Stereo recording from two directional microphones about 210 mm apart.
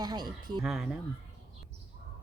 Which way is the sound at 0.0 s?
20° right (ahead or behind).